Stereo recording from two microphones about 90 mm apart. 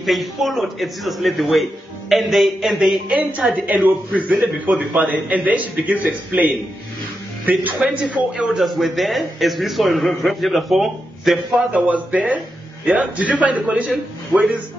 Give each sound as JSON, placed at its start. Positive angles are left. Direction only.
{"t": 0.0, "sound": "a man's voice", "side_deg": 0}
{"t": 3.3, "sound": "a man's voice", "side_deg": -15}
{"t": 11.7, "sound": "a man's voice", "side_deg": -15}